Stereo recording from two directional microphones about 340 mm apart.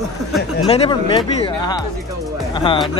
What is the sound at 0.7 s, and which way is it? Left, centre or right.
Speech, centre.